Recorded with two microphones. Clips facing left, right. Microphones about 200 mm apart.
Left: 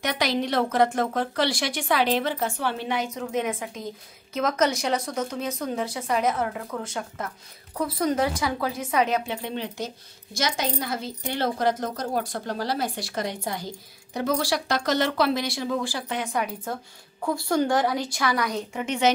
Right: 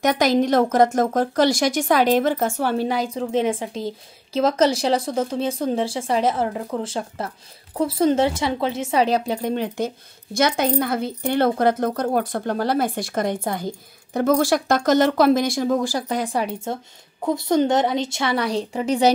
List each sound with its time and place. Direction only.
0.0 s a woman's voice: 45° right (ahead or behind)
17.2 s a woman's voice: 20° right (ahead or behind)